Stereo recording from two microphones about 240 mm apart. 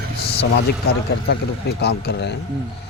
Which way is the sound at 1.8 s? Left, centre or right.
Left.